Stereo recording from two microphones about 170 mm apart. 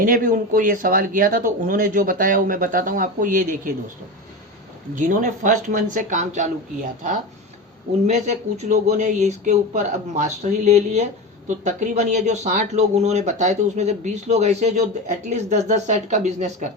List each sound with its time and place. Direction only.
0.0 s speech: 55° right (ahead or behind)
4.9 s speech: 50° right (ahead or behind)
8.0 s speech: 45° right (ahead or behind)